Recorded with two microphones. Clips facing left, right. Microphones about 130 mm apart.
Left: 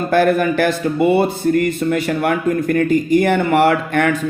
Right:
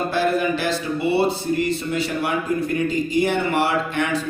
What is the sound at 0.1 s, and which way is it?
Speech, 55° left (ahead or behind).